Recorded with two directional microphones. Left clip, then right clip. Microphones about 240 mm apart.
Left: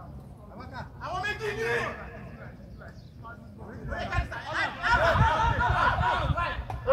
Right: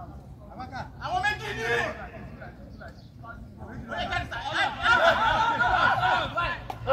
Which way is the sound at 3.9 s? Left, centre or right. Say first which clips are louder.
Right 3 dB; centre.